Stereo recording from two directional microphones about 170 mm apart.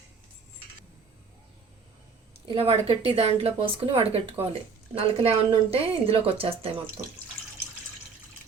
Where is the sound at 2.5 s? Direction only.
35° right (ahead or behind).